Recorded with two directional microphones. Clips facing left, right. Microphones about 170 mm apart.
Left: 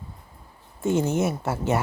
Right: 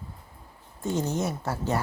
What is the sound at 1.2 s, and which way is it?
Speech, 20° left (ahead or behind).